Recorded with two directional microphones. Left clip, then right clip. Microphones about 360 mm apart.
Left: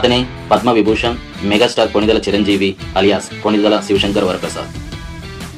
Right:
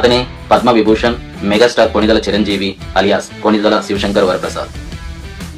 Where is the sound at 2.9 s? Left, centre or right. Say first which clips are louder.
Right 3 dB; centre.